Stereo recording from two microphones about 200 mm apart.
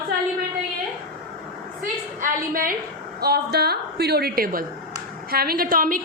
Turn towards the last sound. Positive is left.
turn(degrees=-45)  # may be behind; listen again after turning